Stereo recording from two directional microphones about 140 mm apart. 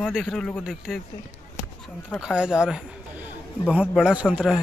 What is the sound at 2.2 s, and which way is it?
Speech, 5° right (ahead or behind).